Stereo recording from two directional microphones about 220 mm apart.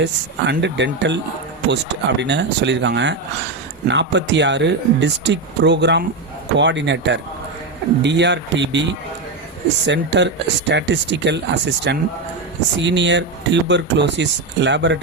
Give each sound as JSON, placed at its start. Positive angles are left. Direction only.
{"t": 0.0, "sound": "speech", "side_deg": -55}